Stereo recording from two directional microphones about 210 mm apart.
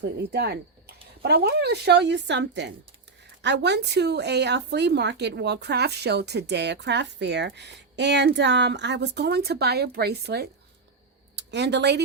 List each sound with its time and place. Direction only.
0.0 s a woman's voice: 50° right (ahead or behind)